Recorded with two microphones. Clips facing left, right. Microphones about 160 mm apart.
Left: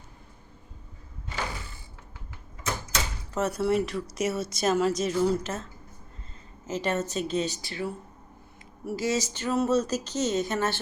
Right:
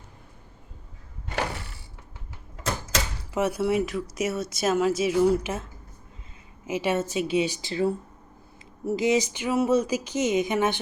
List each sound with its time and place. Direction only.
3.3 s a woman's voice: 10° right (ahead or behind)
6.7 s speech: 10° right (ahead or behind)
7.6 s speech: 25° right (ahead or behind)
8.9 s speech: 20° right (ahead or behind)